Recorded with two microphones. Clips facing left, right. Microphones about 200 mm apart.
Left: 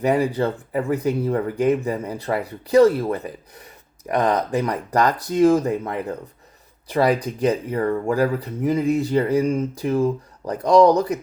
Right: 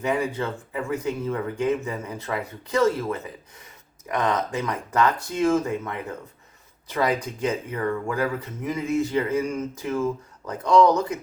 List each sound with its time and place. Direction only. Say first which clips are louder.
0.0 s speech: left 6 dB; 35° left (ahead or behind)